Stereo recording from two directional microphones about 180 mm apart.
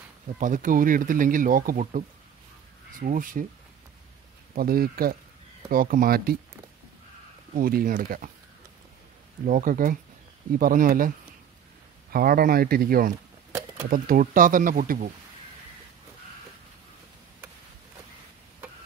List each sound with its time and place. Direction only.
0.4 s speech: 50° right (ahead or behind)
4.6 s speech: 55° right (ahead or behind)
7.5 s speech: 50° right (ahead or behind)
9.5 s speech: 50° right (ahead or behind)